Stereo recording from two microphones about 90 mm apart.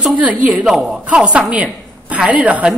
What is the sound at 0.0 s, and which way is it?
Speech, 15° right (ahead or behind).